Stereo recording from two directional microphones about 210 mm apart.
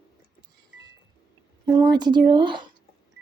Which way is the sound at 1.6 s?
20° right (ahead or behind).